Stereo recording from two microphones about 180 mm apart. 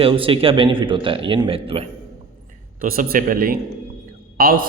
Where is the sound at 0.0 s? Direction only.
30° right (ahead or behind).